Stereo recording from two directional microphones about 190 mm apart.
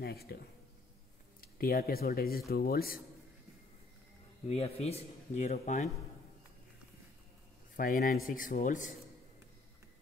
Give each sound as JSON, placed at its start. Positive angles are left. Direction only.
{"t": 0.0, "sound": "speech", "side_deg": 55}
{"t": 1.4, "sound": "speech", "side_deg": 50}
{"t": 4.5, "sound": "speech", "side_deg": 30}
{"t": 7.7, "sound": "speech", "side_deg": 50}